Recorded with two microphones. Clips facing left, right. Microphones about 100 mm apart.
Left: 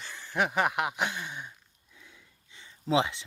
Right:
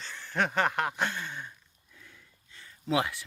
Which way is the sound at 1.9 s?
15° left (ahead or behind).